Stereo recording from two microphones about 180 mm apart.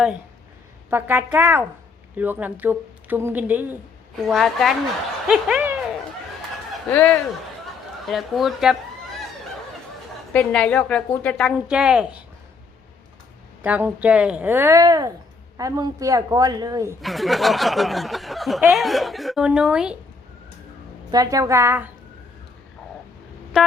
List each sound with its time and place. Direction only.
0.9 s speech: 10° right (ahead or behind)
4.3 s speech: centre (ahead or behind)
6.9 s speech: 10° left (ahead or behind)
10.3 s speech: 5° left (ahead or behind)
13.6 s a woman's voice: 10° right (ahead or behind)
17.0 s speech: centre (ahead or behind)
21.1 s a woman's voice: 20° right (ahead or behind)